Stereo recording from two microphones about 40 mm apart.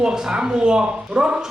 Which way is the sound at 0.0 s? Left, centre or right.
Right.